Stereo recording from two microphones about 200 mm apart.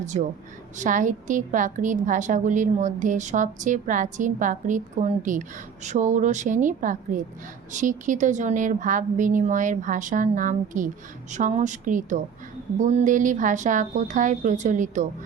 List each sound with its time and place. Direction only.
0.0 s a woman's voice: 35° right (ahead or behind)